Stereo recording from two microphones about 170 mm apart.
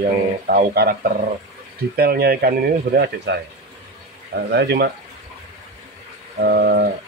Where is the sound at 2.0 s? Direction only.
65° right (ahead or behind).